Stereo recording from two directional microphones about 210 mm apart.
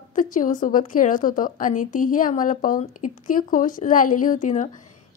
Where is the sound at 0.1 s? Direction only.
40° left (ahead or behind).